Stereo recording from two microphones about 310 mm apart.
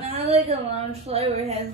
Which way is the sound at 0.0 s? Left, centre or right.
Centre.